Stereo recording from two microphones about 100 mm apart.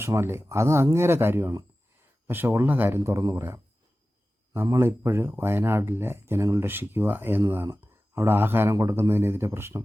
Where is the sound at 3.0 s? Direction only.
30° right (ahead or behind).